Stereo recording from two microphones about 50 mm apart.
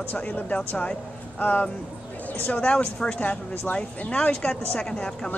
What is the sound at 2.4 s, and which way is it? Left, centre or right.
A woman's voice, left.